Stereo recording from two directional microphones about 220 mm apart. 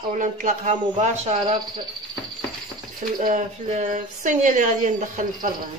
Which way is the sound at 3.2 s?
35° right (ahead or behind).